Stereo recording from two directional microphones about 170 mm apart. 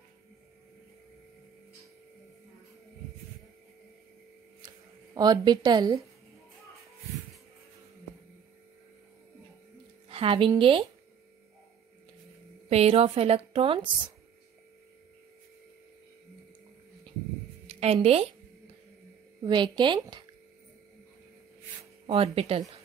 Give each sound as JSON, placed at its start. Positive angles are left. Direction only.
{"t": 4.6, "sound": "a sound", "side_deg": -25}
{"t": 10.0, "sound": "a woman's voice", "side_deg": -35}
{"t": 12.6, "sound": "a woman's voice", "side_deg": -35}
{"t": 17.6, "sound": "a woman's voice", "side_deg": -35}
{"t": 19.4, "sound": "a woman's voice", "side_deg": -25}
{"t": 22.0, "sound": "a woman's voice", "side_deg": -35}